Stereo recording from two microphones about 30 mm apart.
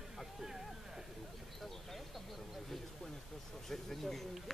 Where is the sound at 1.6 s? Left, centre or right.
Centre.